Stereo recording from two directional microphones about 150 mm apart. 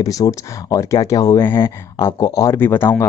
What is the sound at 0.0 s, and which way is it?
Speech, 25° left (ahead or behind).